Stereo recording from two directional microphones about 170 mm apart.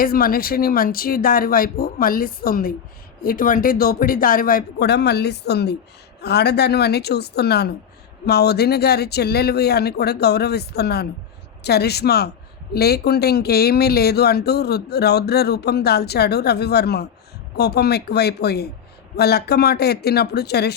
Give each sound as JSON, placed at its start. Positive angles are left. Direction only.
{"t": 0.0, "sound": "speech", "side_deg": 60}